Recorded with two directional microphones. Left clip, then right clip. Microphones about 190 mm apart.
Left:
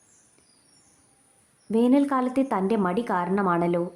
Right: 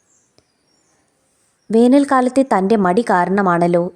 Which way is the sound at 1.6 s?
40° right (ahead or behind).